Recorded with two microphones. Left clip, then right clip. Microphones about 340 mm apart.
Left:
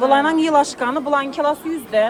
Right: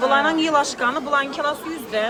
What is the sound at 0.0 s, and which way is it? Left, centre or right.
Speech, centre.